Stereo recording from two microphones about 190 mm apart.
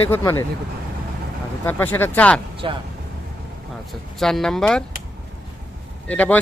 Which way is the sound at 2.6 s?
25° right (ahead or behind).